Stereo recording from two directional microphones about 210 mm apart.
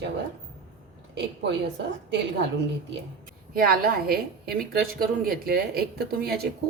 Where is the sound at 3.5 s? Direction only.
45° right (ahead or behind).